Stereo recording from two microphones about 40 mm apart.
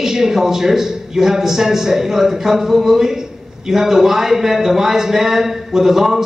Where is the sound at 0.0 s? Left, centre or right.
Centre.